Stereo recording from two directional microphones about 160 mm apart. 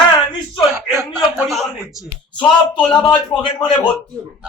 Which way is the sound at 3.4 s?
30° left (ahead or behind).